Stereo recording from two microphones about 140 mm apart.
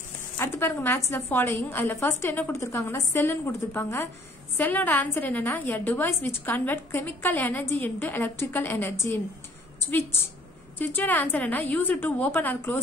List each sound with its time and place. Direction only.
0.4 s a woman's voice: 15° left (ahead or behind)
9.8 s a sound: 15° left (ahead or behind)
10.8 s a woman's voice: 15° left (ahead or behind)